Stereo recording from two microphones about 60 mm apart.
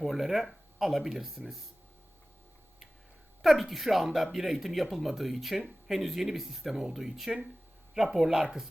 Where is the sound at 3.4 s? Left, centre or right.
Centre.